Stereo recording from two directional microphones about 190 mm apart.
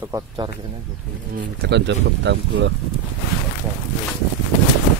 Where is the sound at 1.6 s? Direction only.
65° right (ahead or behind).